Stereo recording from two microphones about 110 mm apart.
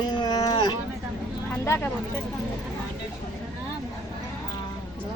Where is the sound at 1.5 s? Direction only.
25° left (ahead or behind).